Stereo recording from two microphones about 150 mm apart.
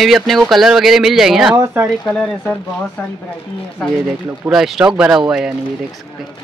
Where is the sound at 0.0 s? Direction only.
Centre (ahead or behind).